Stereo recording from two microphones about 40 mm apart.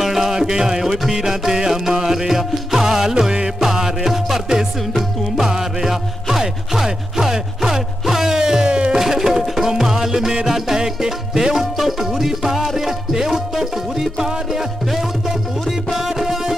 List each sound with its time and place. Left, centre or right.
0.0 s music: centre
8.6 s a sound: right
8.9 s music: centre